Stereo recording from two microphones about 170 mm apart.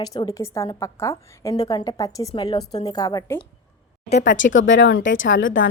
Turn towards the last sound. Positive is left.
turn(degrees=90)